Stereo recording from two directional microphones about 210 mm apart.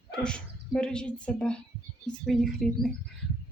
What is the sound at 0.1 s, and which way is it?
A woman's voice, 5° left (ahead or behind).